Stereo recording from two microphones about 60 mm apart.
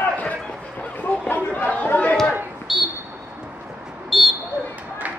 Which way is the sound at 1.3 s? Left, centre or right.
Left.